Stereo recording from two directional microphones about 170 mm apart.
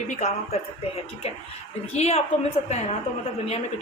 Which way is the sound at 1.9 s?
40° left (ahead or behind).